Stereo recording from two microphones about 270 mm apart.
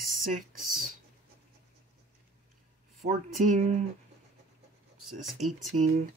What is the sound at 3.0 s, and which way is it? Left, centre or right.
Speech, right.